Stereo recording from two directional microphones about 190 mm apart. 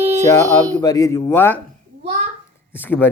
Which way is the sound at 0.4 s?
15° right (ahead or behind).